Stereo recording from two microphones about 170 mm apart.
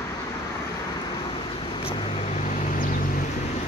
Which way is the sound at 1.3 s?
30° left (ahead or behind).